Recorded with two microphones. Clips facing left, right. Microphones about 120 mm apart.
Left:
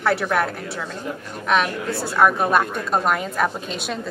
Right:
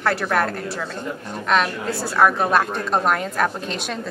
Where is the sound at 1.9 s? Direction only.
Centre (ahead or behind).